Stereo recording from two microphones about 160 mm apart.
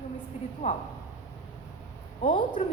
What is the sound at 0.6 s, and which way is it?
Speech, 40° left (ahead or behind).